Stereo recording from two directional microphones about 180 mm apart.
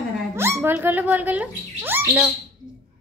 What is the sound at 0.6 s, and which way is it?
Speech, 10° right (ahead or behind).